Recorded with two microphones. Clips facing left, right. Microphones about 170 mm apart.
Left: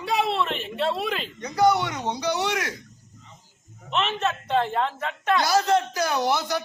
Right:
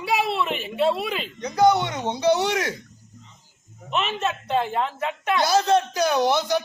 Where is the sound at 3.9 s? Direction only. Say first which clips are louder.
Even; 5° right (ahead or behind).